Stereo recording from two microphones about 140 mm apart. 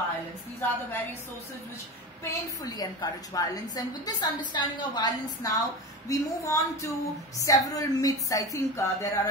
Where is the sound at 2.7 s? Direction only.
30° left (ahead or behind).